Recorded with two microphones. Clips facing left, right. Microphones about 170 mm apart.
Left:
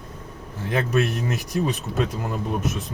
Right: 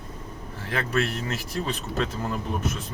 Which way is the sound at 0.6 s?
20° left (ahead or behind).